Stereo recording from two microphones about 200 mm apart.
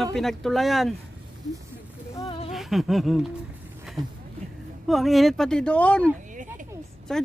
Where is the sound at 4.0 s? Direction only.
20° right (ahead or behind).